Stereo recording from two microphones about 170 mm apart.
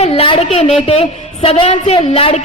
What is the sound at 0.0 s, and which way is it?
A woman's voice, 30° left (ahead or behind).